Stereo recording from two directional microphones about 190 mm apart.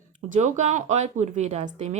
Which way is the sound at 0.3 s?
40° right (ahead or behind).